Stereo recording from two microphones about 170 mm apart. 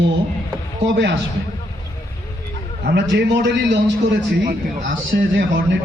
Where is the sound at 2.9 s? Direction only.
90° right.